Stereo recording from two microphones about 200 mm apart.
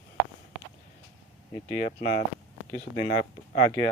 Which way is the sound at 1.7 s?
40° left (ahead or behind).